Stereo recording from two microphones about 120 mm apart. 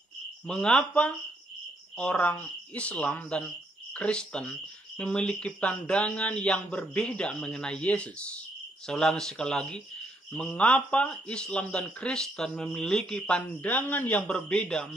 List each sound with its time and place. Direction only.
0.5 s speech: 5° left (ahead or behind)
14.2 s speech: 5° left (ahead or behind)